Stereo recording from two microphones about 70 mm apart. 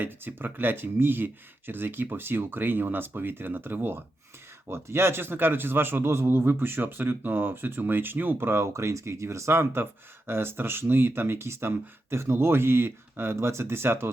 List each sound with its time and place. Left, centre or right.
0.0 s a man's voice: right